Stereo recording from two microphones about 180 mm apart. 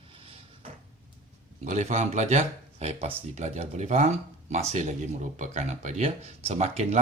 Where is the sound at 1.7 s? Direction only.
40° right (ahead or behind).